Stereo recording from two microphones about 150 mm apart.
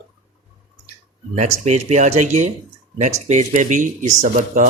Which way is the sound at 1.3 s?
50° right (ahead or behind).